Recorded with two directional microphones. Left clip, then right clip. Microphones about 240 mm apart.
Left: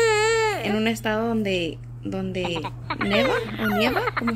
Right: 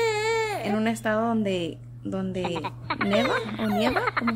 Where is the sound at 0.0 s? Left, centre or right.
Centre.